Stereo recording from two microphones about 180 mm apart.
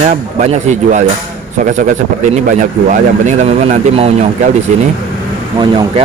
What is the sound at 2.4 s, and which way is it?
Speech, 45° right (ahead or behind).